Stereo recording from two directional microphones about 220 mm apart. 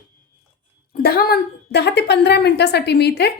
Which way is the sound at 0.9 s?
45° left (ahead or behind).